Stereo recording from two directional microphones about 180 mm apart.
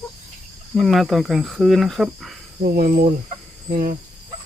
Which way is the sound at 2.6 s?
50° right (ahead or behind).